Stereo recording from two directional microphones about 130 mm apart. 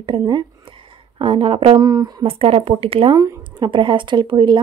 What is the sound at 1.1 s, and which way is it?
Speech, 40° right (ahead or behind).